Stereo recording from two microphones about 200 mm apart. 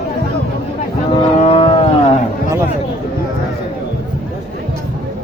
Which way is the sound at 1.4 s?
30° left (ahead or behind).